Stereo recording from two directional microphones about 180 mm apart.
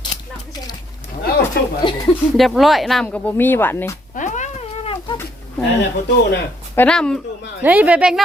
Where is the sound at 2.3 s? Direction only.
Centre (ahead or behind).